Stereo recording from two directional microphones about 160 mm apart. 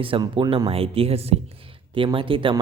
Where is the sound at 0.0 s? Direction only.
35° right (ahead or behind).